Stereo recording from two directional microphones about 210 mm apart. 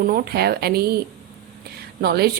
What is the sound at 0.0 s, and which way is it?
Speech, 45° right (ahead or behind).